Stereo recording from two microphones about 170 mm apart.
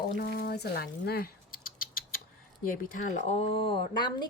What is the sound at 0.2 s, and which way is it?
Rodents, 70° left (ahead or behind).